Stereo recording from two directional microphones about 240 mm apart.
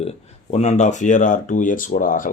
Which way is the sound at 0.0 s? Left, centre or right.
Left.